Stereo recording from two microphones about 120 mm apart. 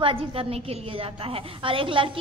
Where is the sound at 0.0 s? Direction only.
50° right (ahead or behind).